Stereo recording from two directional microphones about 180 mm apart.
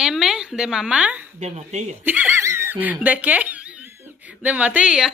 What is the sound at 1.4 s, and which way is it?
Speech, 40° right (ahead or behind).